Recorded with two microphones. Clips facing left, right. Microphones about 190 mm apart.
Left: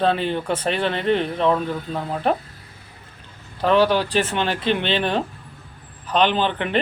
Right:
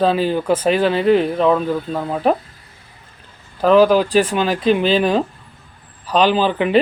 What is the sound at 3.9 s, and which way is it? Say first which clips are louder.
Speech: right 6 dB; 35° right (ahead or behind).